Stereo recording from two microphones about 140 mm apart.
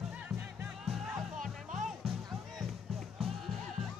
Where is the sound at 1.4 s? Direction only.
65° right (ahead or behind).